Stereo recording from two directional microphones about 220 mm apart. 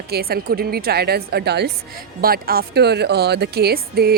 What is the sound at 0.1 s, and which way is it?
A woman's voice, 45° right (ahead or behind).